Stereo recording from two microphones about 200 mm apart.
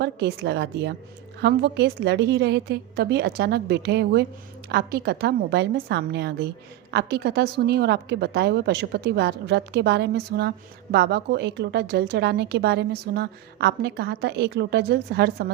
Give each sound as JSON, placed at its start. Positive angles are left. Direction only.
{"t": 0.0, "sound": "a woman's voice", "side_deg": -55}